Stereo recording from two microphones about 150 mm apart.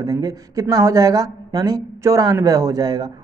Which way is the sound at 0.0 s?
25° right (ahead or behind).